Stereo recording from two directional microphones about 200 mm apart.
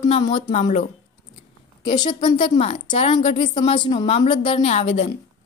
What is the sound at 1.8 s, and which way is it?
A woman's voice, 20° left (ahead or behind).